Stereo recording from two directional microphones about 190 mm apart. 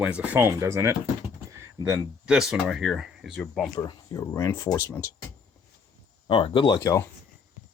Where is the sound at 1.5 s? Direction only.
15° right (ahead or behind).